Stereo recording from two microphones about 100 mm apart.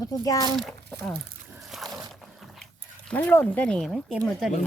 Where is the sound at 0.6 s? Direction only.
Centre (ahead or behind).